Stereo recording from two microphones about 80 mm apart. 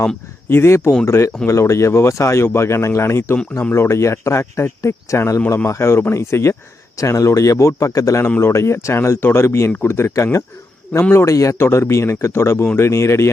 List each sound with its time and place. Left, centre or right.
0.4 s speech: left